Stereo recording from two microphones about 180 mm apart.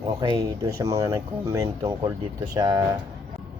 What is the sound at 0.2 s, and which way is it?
Speech, 20° right (ahead or behind).